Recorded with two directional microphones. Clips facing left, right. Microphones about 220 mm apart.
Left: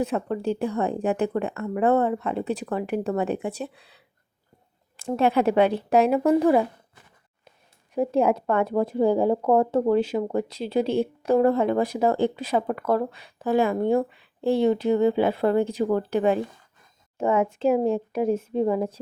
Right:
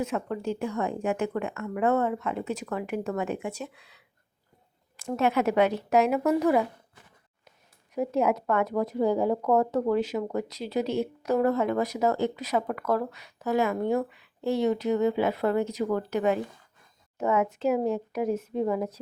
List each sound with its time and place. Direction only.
0.0 s speech: 35° left (ahead or behind)
7.9 s speech: 30° left (ahead or behind)